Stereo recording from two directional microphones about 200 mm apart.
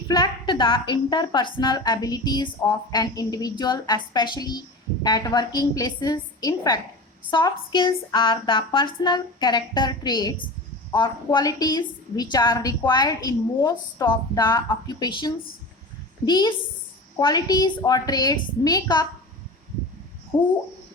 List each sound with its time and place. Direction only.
0.1 s a woman's voice: 20° left (ahead or behind)
20.3 s a woman's voice: 20° left (ahead or behind)